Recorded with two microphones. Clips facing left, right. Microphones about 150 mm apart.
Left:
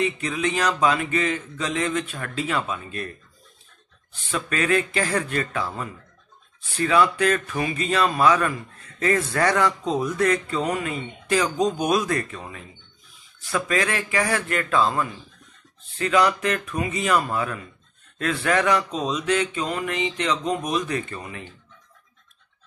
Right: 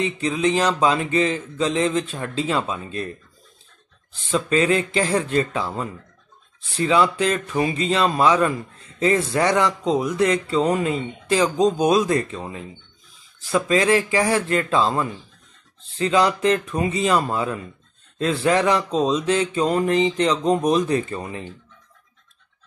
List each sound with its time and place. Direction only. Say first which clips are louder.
0.0 s speech: right 3 dB; 30° right (ahead or behind)
4.1 s speech: right 7 dB; 25° right (ahead or behind)